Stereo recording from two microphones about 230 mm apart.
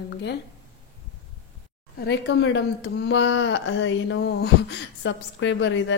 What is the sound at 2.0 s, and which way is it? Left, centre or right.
A woman's voice, left.